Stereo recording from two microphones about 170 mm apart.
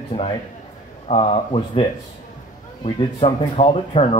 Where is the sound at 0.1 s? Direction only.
30° left (ahead or behind).